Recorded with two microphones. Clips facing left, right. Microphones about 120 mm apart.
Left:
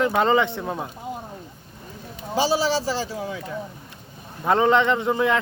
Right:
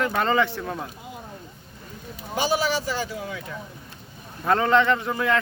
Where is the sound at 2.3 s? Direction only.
30° left (ahead or behind).